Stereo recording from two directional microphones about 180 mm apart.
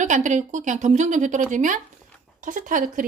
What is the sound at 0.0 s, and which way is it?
Speech, 45° right (ahead or behind).